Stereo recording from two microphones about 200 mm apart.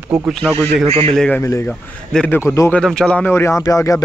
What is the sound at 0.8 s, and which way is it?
Speech, 30° right (ahead or behind).